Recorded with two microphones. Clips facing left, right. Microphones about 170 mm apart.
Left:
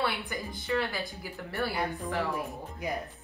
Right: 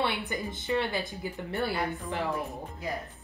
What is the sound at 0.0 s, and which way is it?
Speech, 20° right (ahead or behind).